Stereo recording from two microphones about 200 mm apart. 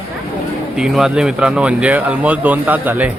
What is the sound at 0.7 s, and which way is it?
Speech, 5° right (ahead or behind).